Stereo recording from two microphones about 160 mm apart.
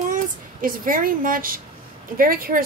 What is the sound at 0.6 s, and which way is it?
Speech, 60° right (ahead or behind).